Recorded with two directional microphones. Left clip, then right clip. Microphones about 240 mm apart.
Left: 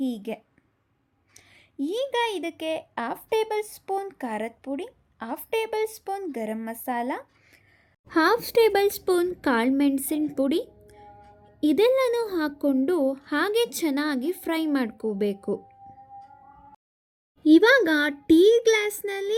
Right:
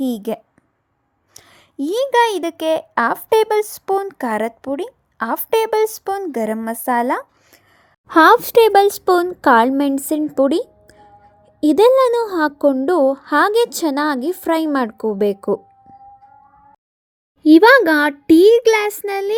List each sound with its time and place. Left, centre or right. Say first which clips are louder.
0.0 s a woman's voice: right 9 dB; centre
8.0 s a child's voice: right 12 dB; right
17.4 s a child's voice: right 8 dB; right